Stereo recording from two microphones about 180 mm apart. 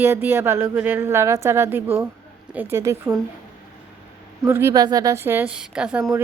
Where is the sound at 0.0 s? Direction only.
10° right (ahead or behind).